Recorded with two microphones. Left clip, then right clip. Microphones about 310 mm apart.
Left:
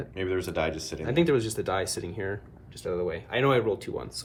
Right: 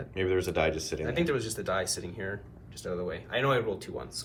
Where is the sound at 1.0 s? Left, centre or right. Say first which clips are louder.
Left 6 dB; left.